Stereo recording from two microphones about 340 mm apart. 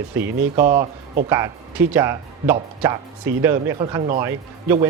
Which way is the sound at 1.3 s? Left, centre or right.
Centre.